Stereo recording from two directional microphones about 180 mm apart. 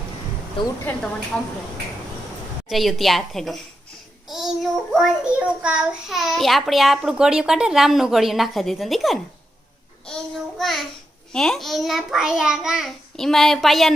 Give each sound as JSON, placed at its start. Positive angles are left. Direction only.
{"t": 0.6, "sound": "a woman's voice", "side_deg": 30}
{"t": 2.6, "sound": "child singing", "side_deg": 0}
{"t": 10.6, "sound": "child singing", "side_deg": 0}